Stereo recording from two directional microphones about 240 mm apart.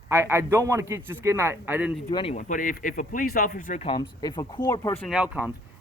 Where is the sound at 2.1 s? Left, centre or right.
Left.